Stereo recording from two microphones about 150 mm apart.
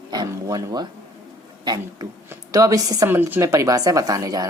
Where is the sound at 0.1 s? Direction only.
25° right (ahead or behind).